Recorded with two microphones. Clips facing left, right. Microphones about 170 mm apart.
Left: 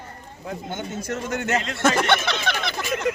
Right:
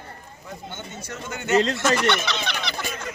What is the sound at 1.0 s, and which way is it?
Speech, 60° left (ahead or behind).